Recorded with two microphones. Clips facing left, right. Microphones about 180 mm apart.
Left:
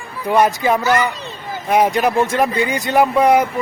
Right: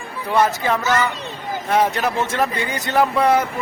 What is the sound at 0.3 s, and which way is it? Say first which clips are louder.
Speech: left 3 dB; 15° left (ahead or behind).